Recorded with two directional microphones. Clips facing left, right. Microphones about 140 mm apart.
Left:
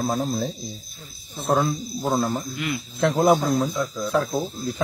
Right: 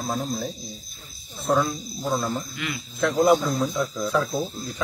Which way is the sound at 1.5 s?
55° left (ahead or behind).